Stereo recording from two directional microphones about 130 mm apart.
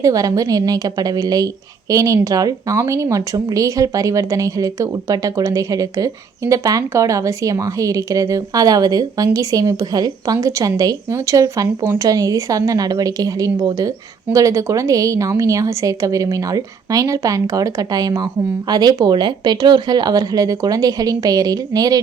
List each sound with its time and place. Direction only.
0.0 s speech: 25° right (ahead or behind)